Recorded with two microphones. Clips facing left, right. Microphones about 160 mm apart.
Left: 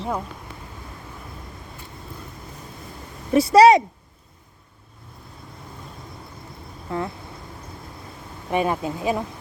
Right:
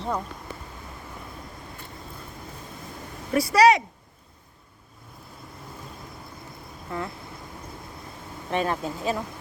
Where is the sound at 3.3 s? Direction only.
25° left (ahead or behind).